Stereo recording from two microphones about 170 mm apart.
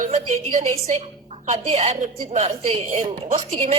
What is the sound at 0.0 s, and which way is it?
A woman's voice, 45° right (ahead or behind).